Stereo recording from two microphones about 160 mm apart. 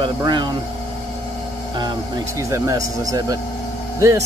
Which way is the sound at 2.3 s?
20° right (ahead or behind).